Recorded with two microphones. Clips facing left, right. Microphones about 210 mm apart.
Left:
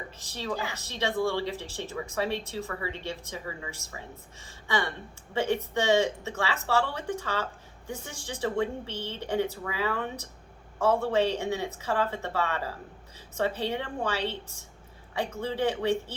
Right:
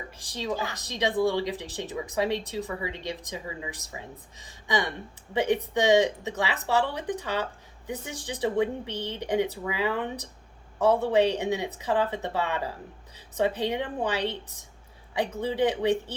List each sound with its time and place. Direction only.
0.2 s speech: 15° right (ahead or behind)
15.4 s speech: 15° right (ahead or behind)